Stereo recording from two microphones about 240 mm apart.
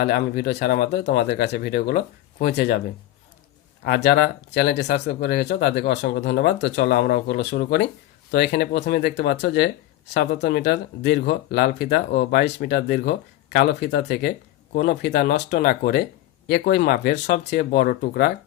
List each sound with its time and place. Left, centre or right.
0.0 s speech: left
3.8 s speech: left